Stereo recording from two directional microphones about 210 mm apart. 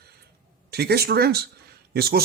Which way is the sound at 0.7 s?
50° right (ahead or behind).